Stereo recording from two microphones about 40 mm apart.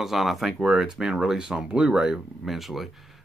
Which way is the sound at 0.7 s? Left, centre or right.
Centre.